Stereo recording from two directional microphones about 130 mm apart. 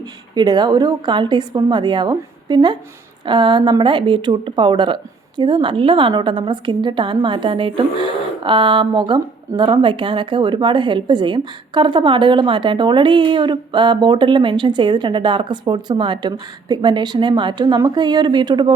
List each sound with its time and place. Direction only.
0.3 s speech: 35° right (ahead or behind)